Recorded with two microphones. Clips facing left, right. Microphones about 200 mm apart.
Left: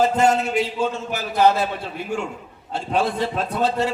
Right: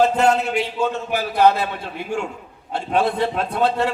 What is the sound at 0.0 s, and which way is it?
A man's voice, 60° right (ahead or behind).